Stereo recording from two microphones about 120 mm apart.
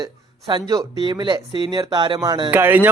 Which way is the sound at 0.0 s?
40° right (ahead or behind).